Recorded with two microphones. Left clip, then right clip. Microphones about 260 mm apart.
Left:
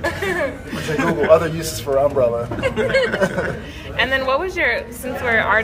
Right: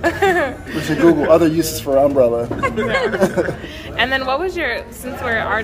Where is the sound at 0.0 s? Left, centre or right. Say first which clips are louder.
Right 5 dB; centre.